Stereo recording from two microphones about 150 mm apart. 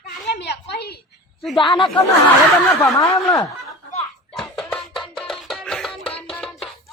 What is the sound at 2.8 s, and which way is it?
Speech, 20° left (ahead or behind).